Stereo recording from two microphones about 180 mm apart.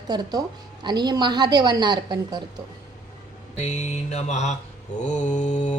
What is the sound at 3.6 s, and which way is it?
Mantra, 40° left (ahead or behind).